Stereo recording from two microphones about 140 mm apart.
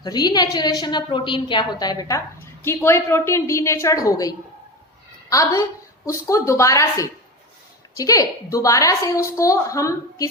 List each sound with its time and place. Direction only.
0.0 s a woman's voice: 30° left (ahead or behind)